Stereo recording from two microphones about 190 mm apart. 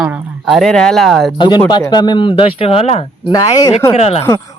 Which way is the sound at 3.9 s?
35° left (ahead or behind).